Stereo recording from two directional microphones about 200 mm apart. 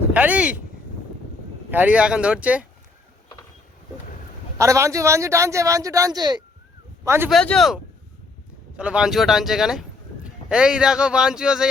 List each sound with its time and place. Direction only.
0.1 s speech: 5° right (ahead or behind)
1.7 s speech: 10° right (ahead or behind)
4.5 s speech: 15° right (ahead or behind)
7.3 s speech: centre (ahead or behind)